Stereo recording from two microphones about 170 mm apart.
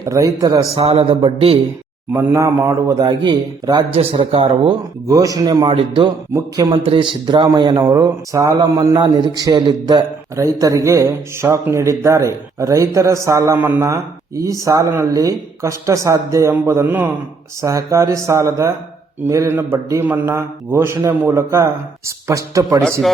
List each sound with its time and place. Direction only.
0.0 s a man's voice: 20° right (ahead or behind)
0.8 s speech: 35° right (ahead or behind)
2.1 s a man's voice: 15° right (ahead or behind); by 4.7 s 35° right (ahead or behind)
5.0 s a man's voice: 20° right (ahead or behind)